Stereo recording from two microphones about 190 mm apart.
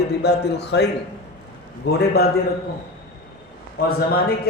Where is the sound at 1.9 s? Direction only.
55° left (ahead or behind).